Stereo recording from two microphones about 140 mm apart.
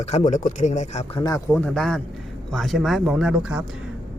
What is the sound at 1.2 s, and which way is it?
Speech, 25° left (ahead or behind).